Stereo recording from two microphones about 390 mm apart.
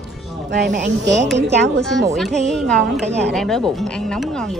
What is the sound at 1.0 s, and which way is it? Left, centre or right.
Speech, centre.